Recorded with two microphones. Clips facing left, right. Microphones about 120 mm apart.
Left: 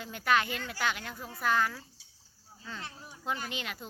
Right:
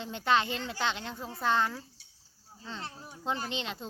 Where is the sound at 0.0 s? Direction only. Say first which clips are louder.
Right 1 dB; 25° right (ahead or behind).